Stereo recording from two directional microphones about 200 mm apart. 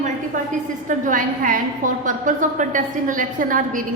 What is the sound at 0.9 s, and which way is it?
A woman's voice, 40° right (ahead or behind).